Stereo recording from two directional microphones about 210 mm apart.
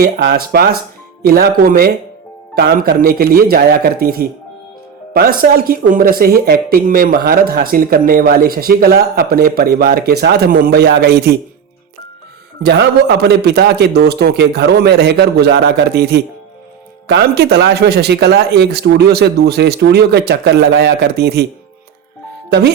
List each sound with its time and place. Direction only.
0.0 s speech: 50° right (ahead or behind)
12.6 s speech: 50° right (ahead or behind)
22.4 s speech: 50° right (ahead or behind)